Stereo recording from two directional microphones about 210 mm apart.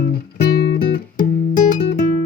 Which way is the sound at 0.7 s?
40° left (ahead or behind).